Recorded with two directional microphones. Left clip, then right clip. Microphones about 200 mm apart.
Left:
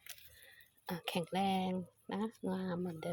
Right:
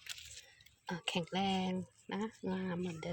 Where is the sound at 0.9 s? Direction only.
10° left (ahead or behind).